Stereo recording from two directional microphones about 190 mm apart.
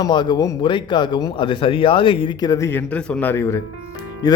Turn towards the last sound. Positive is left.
turn(degrees=20)  # may be behind; listen again after turning